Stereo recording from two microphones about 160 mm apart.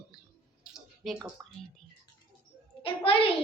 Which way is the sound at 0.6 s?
Centre (ahead or behind).